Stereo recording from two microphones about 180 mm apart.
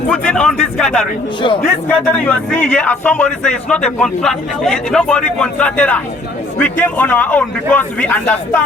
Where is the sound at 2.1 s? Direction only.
5° left (ahead or behind).